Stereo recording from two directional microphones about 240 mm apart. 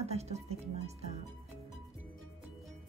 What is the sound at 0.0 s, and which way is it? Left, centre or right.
Music, right.